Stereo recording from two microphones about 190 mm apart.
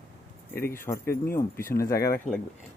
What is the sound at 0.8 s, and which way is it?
Speech, 15° left (ahead or behind).